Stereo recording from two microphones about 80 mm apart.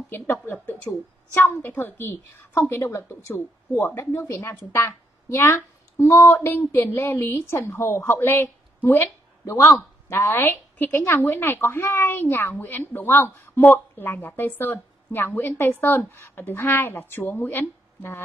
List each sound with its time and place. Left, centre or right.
0.1 s a woman's voice: left